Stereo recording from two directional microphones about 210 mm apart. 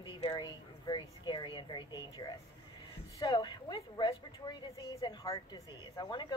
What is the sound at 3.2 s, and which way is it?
A woman's voice, 20° left (ahead or behind).